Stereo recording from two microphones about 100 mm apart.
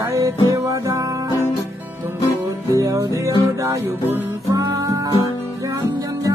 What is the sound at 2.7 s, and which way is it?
Music, 35° right (ahead or behind).